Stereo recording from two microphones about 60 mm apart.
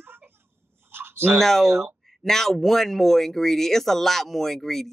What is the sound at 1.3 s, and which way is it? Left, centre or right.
Speech, centre.